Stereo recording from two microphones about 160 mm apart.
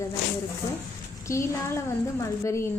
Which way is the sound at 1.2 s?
20° left (ahead or behind).